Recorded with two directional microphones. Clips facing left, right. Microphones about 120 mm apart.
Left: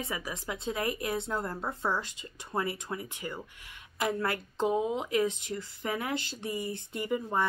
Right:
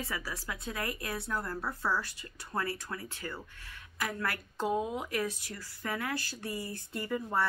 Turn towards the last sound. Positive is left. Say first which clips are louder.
# left 2 dB
turn(degrees=15)  # may be behind; listen again after turning